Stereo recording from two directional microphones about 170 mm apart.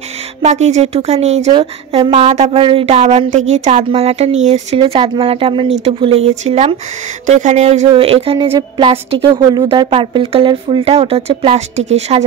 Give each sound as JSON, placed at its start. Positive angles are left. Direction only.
{"t": 0.4, "sound": "speech", "side_deg": -40}